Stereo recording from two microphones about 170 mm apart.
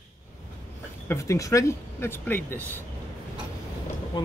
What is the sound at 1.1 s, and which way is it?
Speech, 20° left (ahead or behind).